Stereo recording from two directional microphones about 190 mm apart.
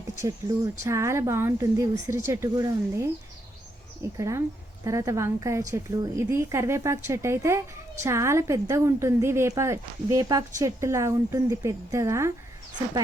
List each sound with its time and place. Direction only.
0.2 s a woman's voice: 20° right (ahead or behind)
4.2 s a woman's voice: 15° right (ahead or behind)